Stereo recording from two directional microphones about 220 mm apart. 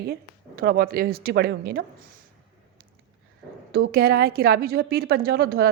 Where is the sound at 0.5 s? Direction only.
45° right (ahead or behind).